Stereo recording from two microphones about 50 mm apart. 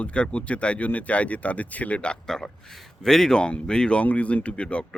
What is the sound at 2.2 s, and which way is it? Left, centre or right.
A man's voice, centre.